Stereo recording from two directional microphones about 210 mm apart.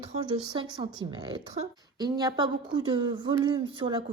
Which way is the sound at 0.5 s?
25° right (ahead or behind).